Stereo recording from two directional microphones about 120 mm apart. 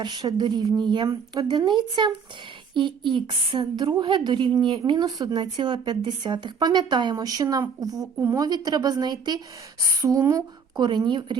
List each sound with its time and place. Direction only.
0.0 s a woman's voice: 35° right (ahead or behind)
9.8 s a sound: 25° right (ahead or behind)
10.8 s a woman's voice: 40° right (ahead or behind)